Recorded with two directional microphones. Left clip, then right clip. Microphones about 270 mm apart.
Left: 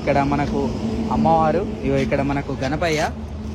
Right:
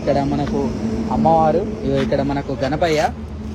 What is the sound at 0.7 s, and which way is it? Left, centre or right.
Speech, centre.